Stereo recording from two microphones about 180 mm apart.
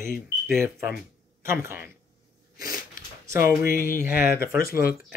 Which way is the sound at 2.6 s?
20° right (ahead or behind).